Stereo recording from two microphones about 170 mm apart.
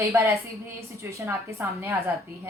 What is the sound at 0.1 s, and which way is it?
A woman's voice, 15° right (ahead or behind).